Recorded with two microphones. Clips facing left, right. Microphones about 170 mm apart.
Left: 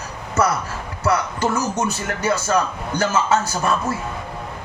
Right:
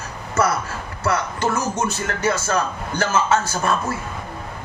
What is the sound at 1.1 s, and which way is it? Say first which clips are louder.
Speech: left 1 dB; 15° left (ahead or behind).